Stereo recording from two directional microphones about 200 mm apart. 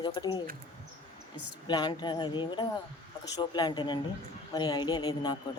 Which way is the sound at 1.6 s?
25° left (ahead or behind).